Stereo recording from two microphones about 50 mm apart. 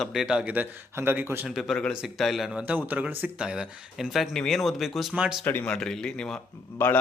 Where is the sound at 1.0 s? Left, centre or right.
Right.